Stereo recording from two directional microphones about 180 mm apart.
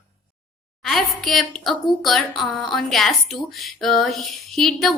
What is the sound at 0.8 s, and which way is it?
A woman's voice, centre (ahead or behind).